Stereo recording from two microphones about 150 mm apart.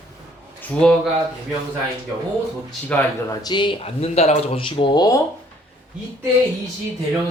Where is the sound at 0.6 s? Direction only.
5° left (ahead or behind).